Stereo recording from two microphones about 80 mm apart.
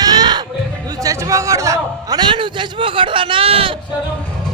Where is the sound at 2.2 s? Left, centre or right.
Right.